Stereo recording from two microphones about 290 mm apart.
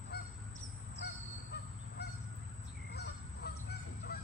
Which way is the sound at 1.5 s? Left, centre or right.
Left.